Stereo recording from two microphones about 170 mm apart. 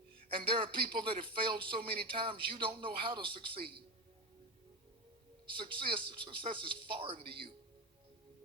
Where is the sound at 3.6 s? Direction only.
65° right (ahead or behind).